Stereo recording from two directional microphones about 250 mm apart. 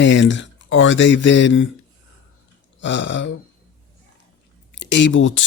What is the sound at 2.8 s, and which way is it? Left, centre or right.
Speech, left.